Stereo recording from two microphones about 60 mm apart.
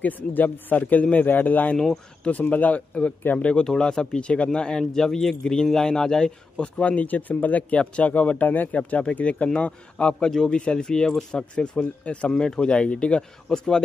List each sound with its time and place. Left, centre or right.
0.0 s speech: left
3.6 s speech: centre